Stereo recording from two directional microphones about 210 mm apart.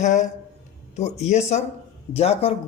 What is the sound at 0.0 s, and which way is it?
Speech, 35° left (ahead or behind).